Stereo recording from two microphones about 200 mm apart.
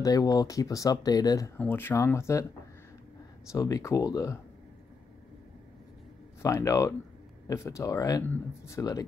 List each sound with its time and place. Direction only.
0.0 s speech: 15° left (ahead or behind)
3.5 s speech: 15° left (ahead or behind)
6.4 s speech: 15° left (ahead or behind)